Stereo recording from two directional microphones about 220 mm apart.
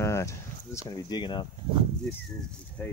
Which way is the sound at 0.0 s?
15° left (ahead or behind).